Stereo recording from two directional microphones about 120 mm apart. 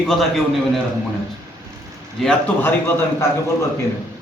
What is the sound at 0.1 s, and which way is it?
Speech, centre (ahead or behind).